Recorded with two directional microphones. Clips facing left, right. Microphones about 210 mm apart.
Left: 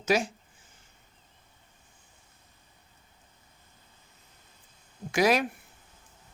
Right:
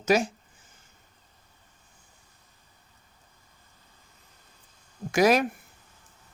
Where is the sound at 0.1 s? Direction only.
45° right (ahead or behind).